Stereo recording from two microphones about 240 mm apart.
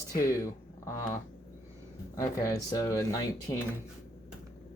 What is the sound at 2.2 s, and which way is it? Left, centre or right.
Speech, centre.